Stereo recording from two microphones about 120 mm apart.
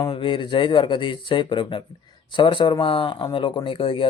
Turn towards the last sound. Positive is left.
turn(degrees=45)  # may be behind; listen again after turning